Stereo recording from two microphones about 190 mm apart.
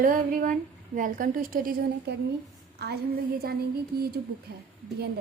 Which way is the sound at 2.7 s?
60° right (ahead or behind).